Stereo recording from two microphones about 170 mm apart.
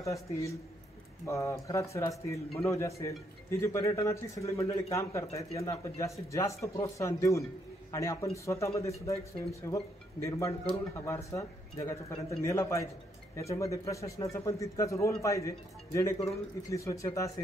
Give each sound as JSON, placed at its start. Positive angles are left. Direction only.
{"t": 0.0, "sound": "speech", "side_deg": 20}